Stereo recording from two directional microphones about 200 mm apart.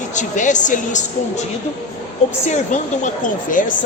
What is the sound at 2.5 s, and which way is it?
A man's voice, 35° left (ahead or behind).